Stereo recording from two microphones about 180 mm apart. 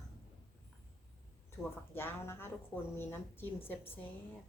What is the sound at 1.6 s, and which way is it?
Speech, 15° left (ahead or behind).